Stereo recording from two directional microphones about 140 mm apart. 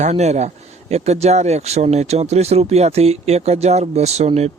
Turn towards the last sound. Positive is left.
turn(degrees=-50)  # may be behind; listen again after turning